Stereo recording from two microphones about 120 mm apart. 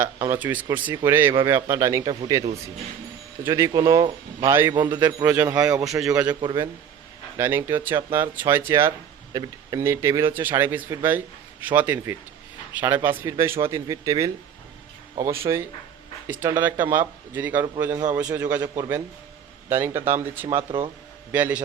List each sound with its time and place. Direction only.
0.3 s speech: 15° right (ahead or behind); by 2.4 s 35° right (ahead or behind)
3.4 s speech: 25° right (ahead or behind)
4.4 s speech: 20° right (ahead or behind)
4.7 s speech: 40° right (ahead or behind)
5.0 s speech: 15° right (ahead or behind)
6.4 s speech: 40° right (ahead or behind)
7.3 s speech: 20° right (ahead or behind)
18.8 s speech: 25° right (ahead or behind)